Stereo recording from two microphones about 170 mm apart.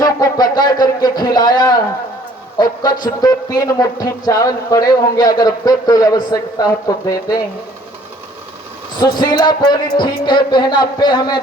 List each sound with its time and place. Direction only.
0.0 s speech: 20° left (ahead or behind)
9.0 s speech: 25° left (ahead or behind)